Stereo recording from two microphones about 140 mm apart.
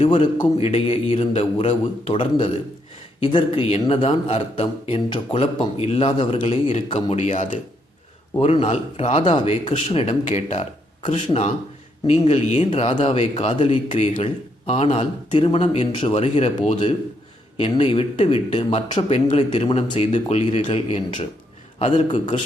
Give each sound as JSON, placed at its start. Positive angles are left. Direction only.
{"t": 0.0, "sound": "a man's voice", "side_deg": 40}
{"t": 7.2, "sound": "speech", "side_deg": 60}
{"t": 8.4, "sound": "speech", "side_deg": 45}